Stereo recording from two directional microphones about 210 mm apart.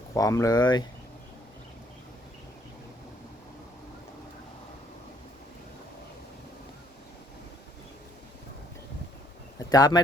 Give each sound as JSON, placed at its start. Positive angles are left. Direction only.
{"t": 0.1, "sound": "speech", "side_deg": 15}
{"t": 9.6, "sound": "speech", "side_deg": 20}